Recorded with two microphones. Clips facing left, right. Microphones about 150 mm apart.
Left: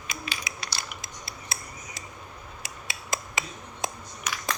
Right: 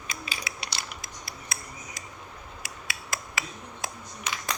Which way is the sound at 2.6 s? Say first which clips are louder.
Even; 20° left (ahead or behind).